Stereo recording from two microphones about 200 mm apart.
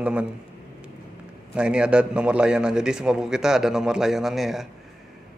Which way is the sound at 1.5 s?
5° right (ahead or behind).